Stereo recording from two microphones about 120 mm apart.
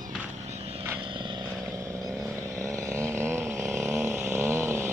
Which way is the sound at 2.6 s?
25° right (ahead or behind).